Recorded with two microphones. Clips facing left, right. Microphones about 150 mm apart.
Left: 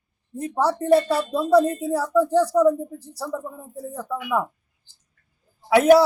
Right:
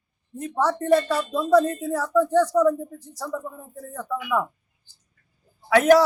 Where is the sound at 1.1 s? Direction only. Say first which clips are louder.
Left 2 dB; 30° left (ahead or behind).